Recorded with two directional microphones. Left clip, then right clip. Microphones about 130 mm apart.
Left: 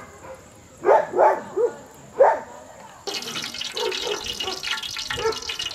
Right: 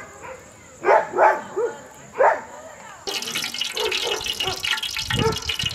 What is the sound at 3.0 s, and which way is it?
Toilet flush, 15° right (ahead or behind).